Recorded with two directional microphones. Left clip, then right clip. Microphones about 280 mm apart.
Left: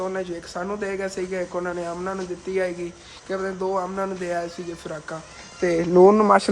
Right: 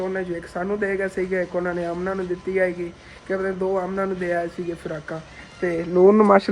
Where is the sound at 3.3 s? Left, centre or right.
Centre.